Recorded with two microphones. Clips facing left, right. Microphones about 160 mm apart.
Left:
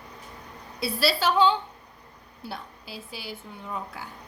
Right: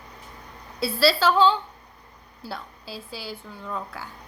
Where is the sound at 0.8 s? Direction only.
20° left (ahead or behind).